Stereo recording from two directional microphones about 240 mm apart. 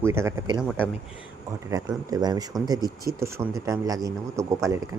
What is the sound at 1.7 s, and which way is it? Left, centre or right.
Speech, centre.